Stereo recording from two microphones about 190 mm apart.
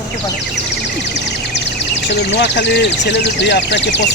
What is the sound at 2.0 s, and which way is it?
Speech, 65° left (ahead or behind).